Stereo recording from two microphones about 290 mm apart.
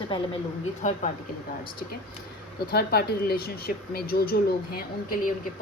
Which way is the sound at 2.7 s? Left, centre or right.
Left.